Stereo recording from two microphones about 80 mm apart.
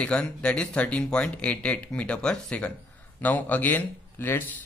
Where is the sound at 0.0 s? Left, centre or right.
Centre.